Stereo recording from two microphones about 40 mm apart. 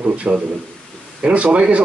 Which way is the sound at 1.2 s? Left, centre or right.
Right.